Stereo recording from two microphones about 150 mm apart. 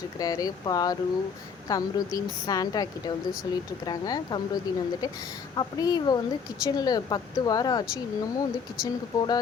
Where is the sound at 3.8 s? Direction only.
25° left (ahead or behind).